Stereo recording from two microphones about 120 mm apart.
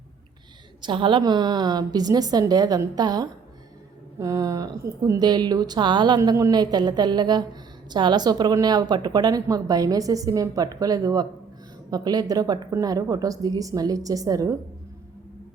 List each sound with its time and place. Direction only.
0.8 s a woman's voice: 45° right (ahead or behind)
6.1 s a woman's voice: 25° right (ahead or behind)